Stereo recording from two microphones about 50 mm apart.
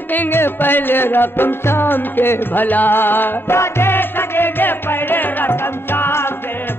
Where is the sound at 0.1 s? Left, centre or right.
Left.